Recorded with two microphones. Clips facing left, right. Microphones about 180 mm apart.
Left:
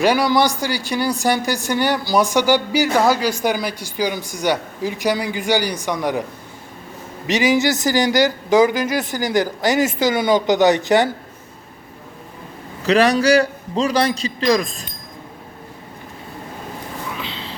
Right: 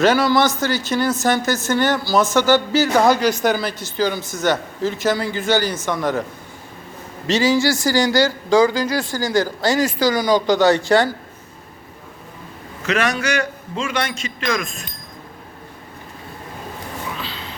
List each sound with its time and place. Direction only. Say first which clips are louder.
0.0 s speech: right 1 dB; 15° left (ahead or behind)
7.3 s speech: even; 15° left (ahead or behind)
12.8 s a man's voice: left 6 dB; 35° left (ahead or behind)
17.2 s a sound: left 1 dB; 20° left (ahead or behind)